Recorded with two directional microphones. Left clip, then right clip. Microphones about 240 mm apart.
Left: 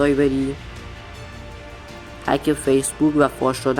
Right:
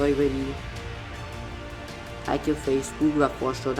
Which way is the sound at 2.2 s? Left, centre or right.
Left.